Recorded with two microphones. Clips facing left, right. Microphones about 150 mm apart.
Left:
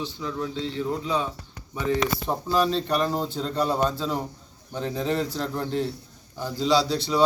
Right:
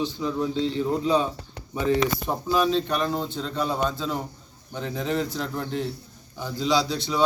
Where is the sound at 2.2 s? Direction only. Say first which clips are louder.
Even; 5° right (ahead or behind).